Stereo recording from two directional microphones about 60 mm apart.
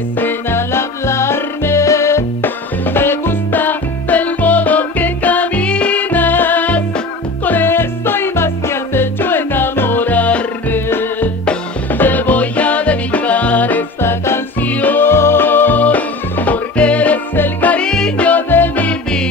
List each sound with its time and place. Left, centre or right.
0.2 s music: left
2.4 s music: left
10.9 s music: left
14.0 s music: left
14.6 s music: left
15.0 s music: left
17.8 s music: centre
18.2 s music: left